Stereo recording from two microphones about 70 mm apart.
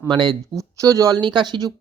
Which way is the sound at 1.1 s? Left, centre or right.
Right.